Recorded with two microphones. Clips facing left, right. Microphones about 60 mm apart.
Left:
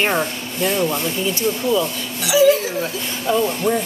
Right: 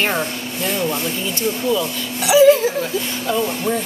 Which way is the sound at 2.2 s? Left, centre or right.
Right.